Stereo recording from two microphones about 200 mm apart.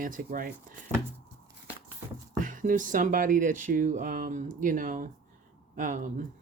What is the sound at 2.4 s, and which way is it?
Speech, 40° right (ahead or behind).